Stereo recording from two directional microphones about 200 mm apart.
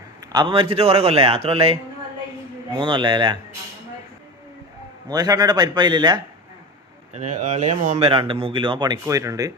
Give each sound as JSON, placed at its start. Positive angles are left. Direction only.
{"t": 0.3, "sound": "a man's voice", "side_deg": -25}
{"t": 5.0, "sound": "a man's voice", "side_deg": -20}
{"t": 7.1, "sound": "a man's voice", "side_deg": -35}